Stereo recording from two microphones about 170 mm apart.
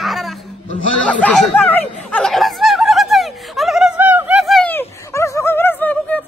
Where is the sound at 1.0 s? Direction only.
5° left (ahead or behind).